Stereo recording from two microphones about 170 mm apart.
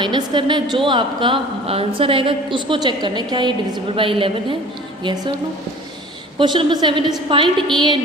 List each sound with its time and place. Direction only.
0.0 s speech: 25° right (ahead or behind)
6.4 s speech: 25° right (ahead or behind)